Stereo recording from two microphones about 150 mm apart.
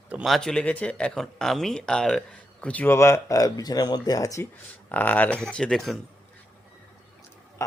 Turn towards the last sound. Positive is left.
turn(degrees=20)  # may be behind; listen again after turning